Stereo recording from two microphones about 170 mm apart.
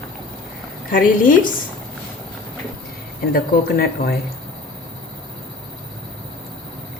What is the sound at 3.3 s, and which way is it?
Speech, 60° left (ahead or behind).